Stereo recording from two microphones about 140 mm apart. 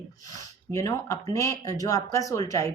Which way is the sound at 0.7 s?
25° left (ahead or behind).